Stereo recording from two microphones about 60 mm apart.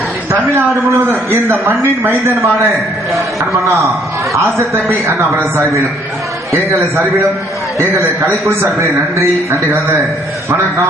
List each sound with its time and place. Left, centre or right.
0.9 s a man's voice: right
3.8 s a man's voice: centre
5.0 s a man's voice: right
7.8 s a man's voice: right